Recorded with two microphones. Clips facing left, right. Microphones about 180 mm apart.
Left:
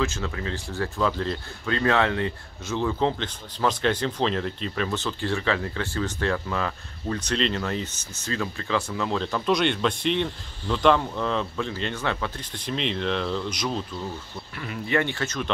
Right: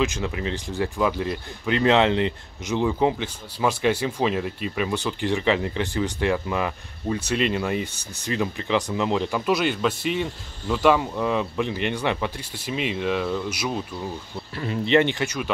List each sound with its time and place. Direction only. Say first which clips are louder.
0.0 s speech: right 3 dB; 15° right (ahead or behind)
14.6 s speech: right 6 dB; 25° right (ahead or behind)